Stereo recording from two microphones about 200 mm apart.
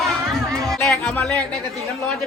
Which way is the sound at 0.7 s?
5° left (ahead or behind).